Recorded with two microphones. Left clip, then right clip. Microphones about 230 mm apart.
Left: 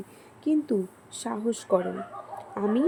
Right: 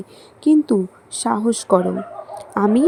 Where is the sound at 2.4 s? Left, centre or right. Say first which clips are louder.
Right 10 dB; right.